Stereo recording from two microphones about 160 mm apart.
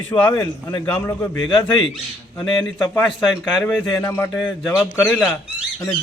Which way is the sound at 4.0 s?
15° left (ahead or behind).